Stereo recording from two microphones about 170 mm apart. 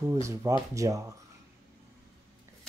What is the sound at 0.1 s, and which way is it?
Speech, 20° right (ahead or behind).